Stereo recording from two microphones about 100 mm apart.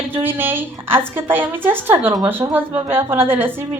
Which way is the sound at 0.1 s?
20° right (ahead or behind).